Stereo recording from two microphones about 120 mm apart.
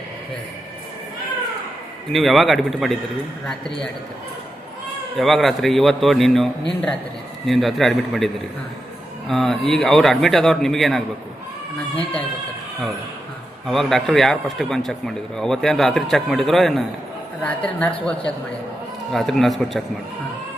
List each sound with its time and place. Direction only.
2.1 s speech: centre (ahead or behind)
5.1 s speech: centre (ahead or behind)
13.7 s a woman's voice: centre (ahead or behind)
19.1 s speech: centre (ahead or behind)